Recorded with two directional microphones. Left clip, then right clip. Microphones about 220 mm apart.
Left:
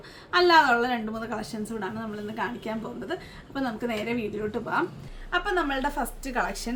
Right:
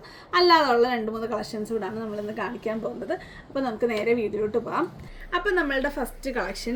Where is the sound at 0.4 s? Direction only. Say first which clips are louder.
Right 1 dB; 15° left (ahead or behind).